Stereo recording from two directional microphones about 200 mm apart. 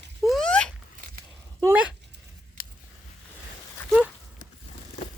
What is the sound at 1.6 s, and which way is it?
Speech, 5° right (ahead or behind).